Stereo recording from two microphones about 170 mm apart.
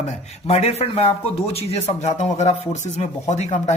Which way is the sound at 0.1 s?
40° left (ahead or behind).